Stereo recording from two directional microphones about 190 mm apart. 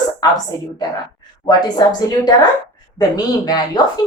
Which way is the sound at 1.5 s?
20° left (ahead or behind).